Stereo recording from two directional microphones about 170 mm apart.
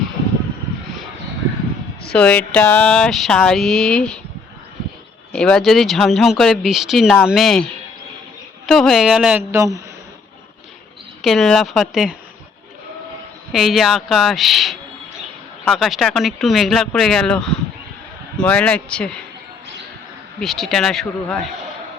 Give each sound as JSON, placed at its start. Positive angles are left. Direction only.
{"t": 2.0, "sound": "speech", "side_deg": 5}
{"t": 5.3, "sound": "speech", "side_deg": 5}
{"t": 9.5, "sound": "a man's voice", "side_deg": -20}
{"t": 11.2, "sound": "speech", "side_deg": 0}
{"t": 13.5, "sound": "speech", "side_deg": 0}
{"t": 20.4, "sound": "speech", "side_deg": 0}